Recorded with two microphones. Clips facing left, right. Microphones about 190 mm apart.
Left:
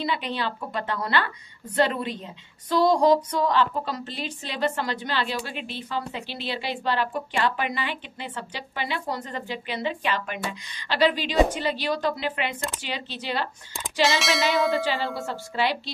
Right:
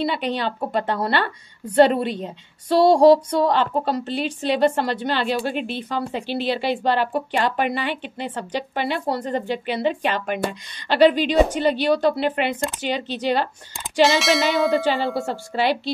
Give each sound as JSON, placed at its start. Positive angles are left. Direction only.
{"t": 0.0, "sound": "a woman's voice", "side_deg": -60}
{"t": 2.7, "sound": "female singing", "side_deg": -30}
{"t": 3.5, "sound": "a woman's voice", "side_deg": -65}
{"t": 14.0, "sound": "a sound", "side_deg": 0}
{"t": 15.2, "sound": "a woman's voice", "side_deg": -55}